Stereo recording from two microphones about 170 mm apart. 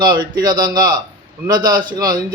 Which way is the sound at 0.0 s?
25° right (ahead or behind).